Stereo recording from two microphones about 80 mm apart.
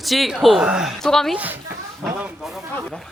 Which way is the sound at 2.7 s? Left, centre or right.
Centre.